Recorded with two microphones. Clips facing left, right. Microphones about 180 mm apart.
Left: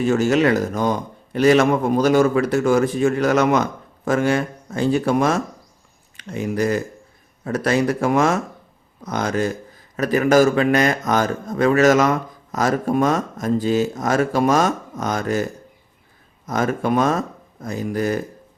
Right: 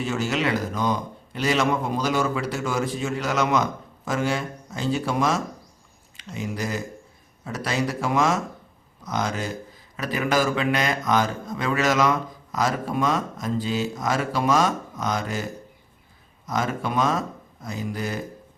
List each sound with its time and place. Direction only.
0.0 s a man's voice: 50° left (ahead or behind)
16.5 s a man's voice: 50° left (ahead or behind)